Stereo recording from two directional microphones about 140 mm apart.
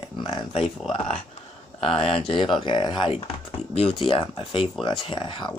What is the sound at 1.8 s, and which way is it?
Speech, 40° left (ahead or behind).